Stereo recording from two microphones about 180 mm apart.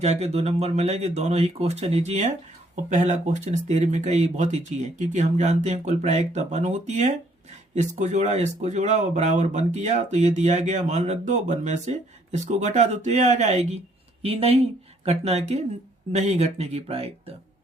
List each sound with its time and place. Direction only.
0.0 s speech: 35° right (ahead or behind)